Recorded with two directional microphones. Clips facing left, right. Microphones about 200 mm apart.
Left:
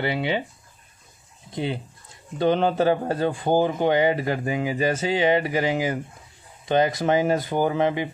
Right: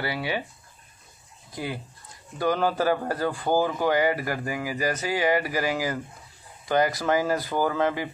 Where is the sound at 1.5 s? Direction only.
25° left (ahead or behind).